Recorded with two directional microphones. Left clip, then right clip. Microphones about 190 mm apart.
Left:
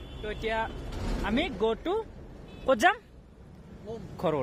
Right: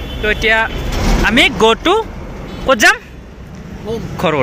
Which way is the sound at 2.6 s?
20° left (ahead or behind).